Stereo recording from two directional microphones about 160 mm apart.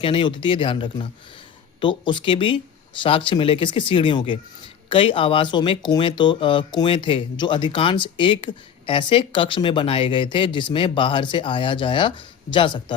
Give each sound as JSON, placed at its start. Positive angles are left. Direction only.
{"t": 0.0, "sound": "speech", "side_deg": 35}